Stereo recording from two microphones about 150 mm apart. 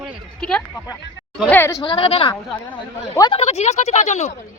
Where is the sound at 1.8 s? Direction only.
35° left (ahead or behind).